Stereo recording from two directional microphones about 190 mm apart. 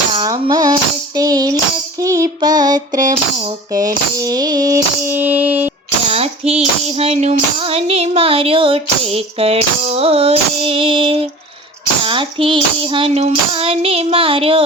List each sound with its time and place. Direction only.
0.1 s tambourine: 25° right (ahead or behind)
2.0 s child singing: 20° right (ahead or behind)
3.7 s music: 20° right (ahead or behind)
6.1 s a sound: 30° right (ahead or behind)
6.9 s music: 30° right (ahead or behind)
12.0 s child singing: 25° right (ahead or behind)